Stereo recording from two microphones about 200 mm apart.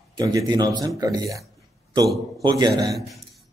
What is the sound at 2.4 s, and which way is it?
Speech, 20° right (ahead or behind).